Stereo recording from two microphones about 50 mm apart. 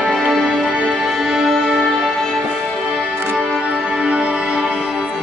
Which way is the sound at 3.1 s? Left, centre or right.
Right.